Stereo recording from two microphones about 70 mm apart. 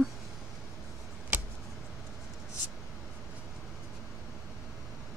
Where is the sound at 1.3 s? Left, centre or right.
Right.